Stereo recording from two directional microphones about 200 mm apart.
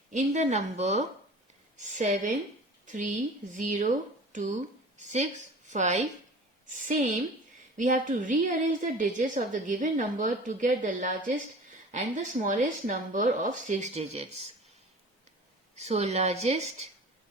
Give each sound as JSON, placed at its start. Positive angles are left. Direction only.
{"t": 0.1, "sound": "a woman's voice", "side_deg": -35}
{"t": 15.7, "sound": "a woman's voice", "side_deg": -30}